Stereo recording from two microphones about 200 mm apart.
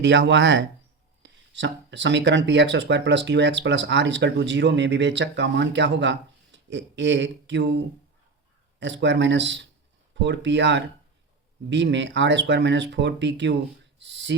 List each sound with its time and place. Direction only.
0.0 s speech: 65° right (ahead or behind)
8.8 s speech: 65° right (ahead or behind)